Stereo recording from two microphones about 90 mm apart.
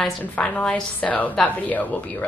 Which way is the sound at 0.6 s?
15° left (ahead or behind).